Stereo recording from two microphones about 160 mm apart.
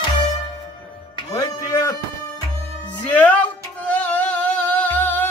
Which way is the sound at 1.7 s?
20° left (ahead or behind).